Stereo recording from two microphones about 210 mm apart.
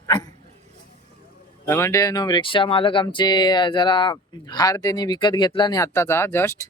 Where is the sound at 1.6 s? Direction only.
10° left (ahead or behind).